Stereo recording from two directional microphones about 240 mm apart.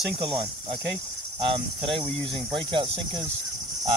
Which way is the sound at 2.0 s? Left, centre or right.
Right.